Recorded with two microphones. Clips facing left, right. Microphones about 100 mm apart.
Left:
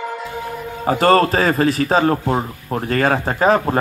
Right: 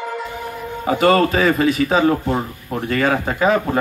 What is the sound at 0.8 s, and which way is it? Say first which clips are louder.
Speech: left 1 dB; 35° left (ahead or behind).